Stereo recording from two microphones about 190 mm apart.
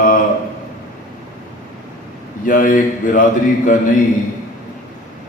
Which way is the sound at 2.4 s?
45° left (ahead or behind).